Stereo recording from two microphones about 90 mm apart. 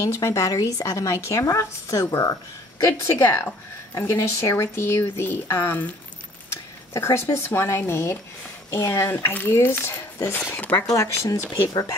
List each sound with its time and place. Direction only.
0.0 s speech: 35° left (ahead or behind)
10.9 s speech: 35° left (ahead or behind)